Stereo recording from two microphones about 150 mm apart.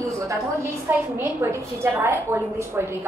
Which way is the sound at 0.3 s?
15° right (ahead or behind).